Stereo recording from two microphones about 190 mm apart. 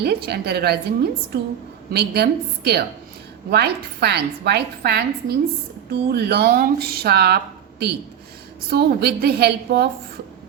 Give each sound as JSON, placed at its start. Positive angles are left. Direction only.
{"t": 0.0, "sound": "speech", "side_deg": -60}